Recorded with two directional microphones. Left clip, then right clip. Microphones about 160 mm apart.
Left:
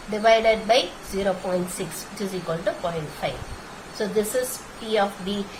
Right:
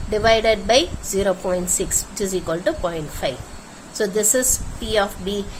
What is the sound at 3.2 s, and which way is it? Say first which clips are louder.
A woman's voice: right 4 dB; 65° right (ahead or behind).